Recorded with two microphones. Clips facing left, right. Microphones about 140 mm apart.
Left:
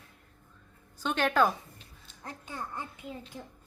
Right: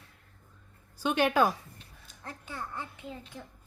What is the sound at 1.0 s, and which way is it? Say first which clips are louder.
Speech: right 1 dB; 10° right (ahead or behind).